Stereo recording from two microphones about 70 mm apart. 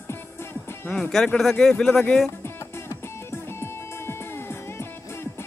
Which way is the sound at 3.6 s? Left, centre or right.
Left.